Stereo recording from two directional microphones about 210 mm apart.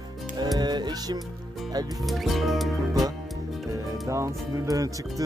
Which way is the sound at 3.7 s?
15° right (ahead or behind).